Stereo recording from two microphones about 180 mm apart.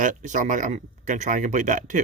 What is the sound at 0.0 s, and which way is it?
Speech, 45° right (ahead or behind).